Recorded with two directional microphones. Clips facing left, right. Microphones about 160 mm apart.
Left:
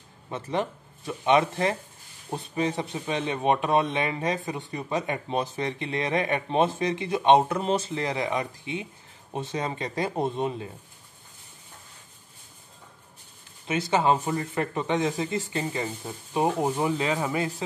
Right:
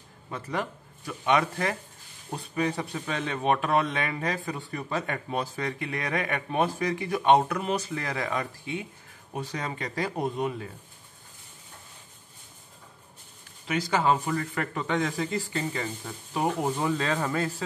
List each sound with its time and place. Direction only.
0.3 s speech: 25° left (ahead or behind)
13.7 s speech: 25° left (ahead or behind)